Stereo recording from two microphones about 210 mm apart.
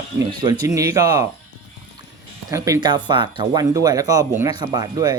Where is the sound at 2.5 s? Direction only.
15° right (ahead or behind).